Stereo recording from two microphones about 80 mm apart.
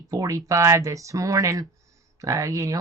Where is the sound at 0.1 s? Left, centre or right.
Right.